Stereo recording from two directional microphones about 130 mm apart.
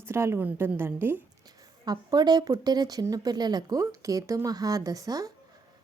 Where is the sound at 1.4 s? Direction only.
30° right (ahead or behind).